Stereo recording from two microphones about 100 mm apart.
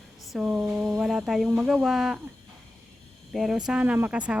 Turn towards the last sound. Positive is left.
turn(degrees=-15)  # may be behind; listen again after turning